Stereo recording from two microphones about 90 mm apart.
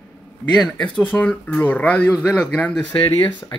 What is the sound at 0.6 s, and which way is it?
Speech, 5° left (ahead or behind).